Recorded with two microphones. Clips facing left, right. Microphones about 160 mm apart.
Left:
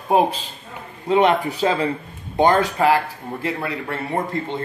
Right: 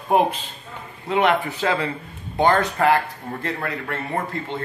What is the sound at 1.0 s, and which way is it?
Speech, 20° left (ahead or behind).